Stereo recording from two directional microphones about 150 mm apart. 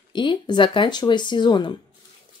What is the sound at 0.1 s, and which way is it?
Speech, 30° left (ahead or behind).